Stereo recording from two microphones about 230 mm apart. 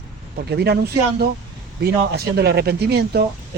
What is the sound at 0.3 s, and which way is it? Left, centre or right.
Speech, right.